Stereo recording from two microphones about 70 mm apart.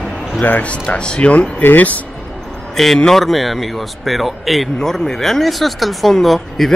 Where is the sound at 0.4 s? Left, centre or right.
Centre.